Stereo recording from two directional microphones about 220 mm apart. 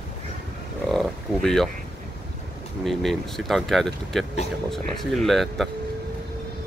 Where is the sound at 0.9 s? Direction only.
Centre (ahead or behind).